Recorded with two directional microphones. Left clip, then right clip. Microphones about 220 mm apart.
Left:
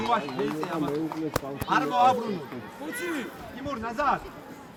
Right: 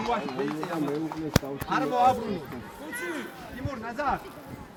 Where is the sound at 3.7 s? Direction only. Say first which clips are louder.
Left 3 dB; 20° right (ahead or behind).